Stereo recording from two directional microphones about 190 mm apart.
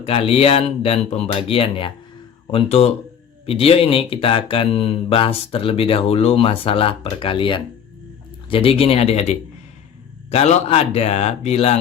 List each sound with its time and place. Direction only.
0.0 s speech: 30° left (ahead or behind)